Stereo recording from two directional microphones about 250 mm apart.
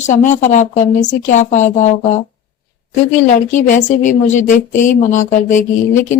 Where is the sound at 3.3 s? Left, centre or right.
Left.